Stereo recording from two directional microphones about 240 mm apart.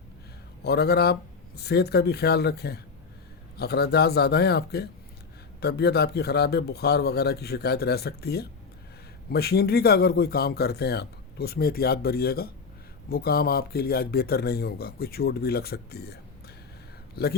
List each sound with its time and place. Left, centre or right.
0.6 s speech: left
17.2 s speech: left